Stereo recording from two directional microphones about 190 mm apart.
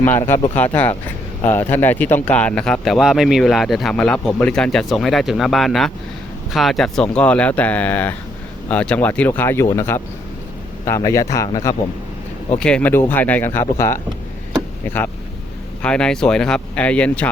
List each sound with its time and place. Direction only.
0.0 s speech: 10° left (ahead or behind)
12.5 s speech: 5° left (ahead or behind)